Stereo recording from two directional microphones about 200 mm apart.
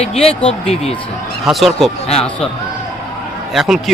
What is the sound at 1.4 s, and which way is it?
Speech, centre (ahead or behind).